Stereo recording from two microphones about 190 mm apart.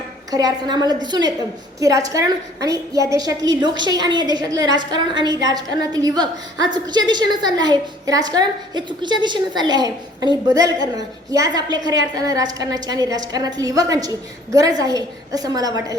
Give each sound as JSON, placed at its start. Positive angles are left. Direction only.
{"t": 0.3, "sound": "a woman's voice", "side_deg": -20}